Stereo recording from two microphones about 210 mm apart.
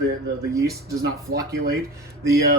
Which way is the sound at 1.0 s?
50° right (ahead or behind).